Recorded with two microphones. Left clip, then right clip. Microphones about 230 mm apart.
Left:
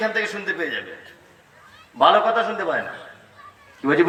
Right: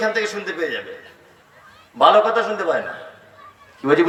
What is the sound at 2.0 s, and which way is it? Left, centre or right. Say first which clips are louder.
Speech: right 2 dB; right.